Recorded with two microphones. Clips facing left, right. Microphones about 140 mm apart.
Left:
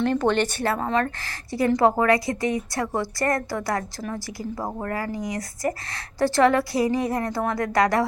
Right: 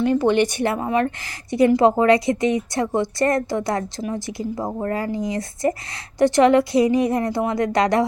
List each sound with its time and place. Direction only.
0.0 s a woman's voice: 5° right (ahead or behind)